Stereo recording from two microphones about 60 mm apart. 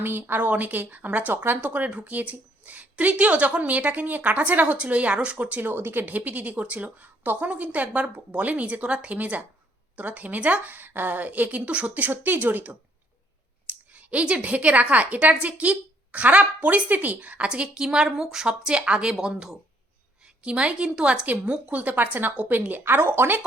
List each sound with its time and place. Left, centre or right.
0.0 s speech: right